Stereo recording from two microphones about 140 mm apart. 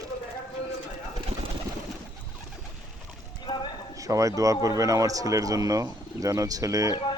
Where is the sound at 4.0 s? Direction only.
25° right (ahead or behind).